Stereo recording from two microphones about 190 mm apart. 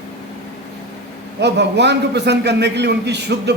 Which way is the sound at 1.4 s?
65° right (ahead or behind).